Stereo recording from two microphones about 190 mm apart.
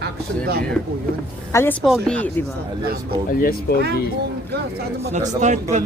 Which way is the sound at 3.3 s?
50° left (ahead or behind).